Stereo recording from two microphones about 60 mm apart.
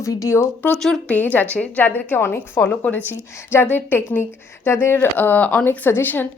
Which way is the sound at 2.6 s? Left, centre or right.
Left.